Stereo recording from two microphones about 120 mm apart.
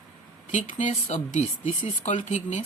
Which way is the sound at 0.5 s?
80° left.